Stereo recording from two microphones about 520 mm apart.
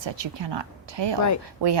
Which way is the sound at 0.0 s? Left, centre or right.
Right.